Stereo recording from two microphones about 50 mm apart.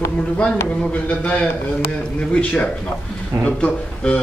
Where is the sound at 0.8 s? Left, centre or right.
Left.